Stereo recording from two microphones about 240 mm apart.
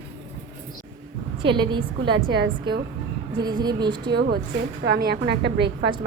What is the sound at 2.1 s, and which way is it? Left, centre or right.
Speech, right.